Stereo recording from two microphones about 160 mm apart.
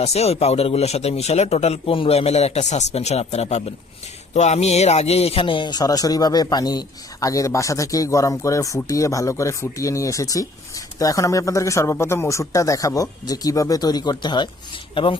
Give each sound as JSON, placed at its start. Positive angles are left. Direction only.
{"t": 0.0, "sound": "a man's voice", "side_deg": 40}